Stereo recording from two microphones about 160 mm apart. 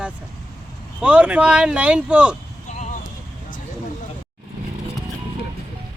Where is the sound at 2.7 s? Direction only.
50° left (ahead or behind).